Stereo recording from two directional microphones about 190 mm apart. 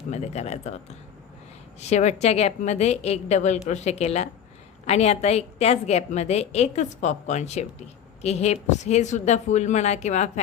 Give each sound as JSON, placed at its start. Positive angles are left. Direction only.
{"t": 0.1, "sound": "a woman's voice", "side_deg": 35}
{"t": 1.8, "sound": "a woman's voice", "side_deg": 35}